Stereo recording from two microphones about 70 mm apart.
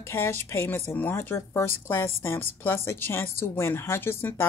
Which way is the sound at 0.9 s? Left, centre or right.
Left.